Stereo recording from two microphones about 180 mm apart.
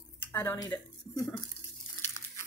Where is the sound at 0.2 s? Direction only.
15° left (ahead or behind).